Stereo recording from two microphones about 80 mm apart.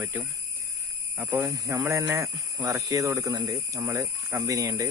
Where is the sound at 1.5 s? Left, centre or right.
Right.